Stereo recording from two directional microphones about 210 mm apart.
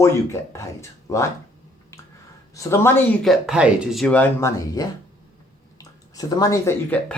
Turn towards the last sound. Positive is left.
turn(degrees=10)  # may be behind; listen again after turning